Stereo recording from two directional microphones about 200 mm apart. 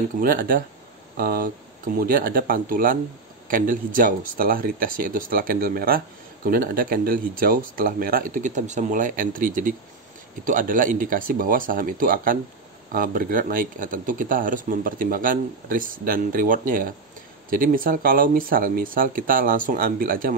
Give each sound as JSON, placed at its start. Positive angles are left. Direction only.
{"t": 0.2, "sound": "speech", "side_deg": -45}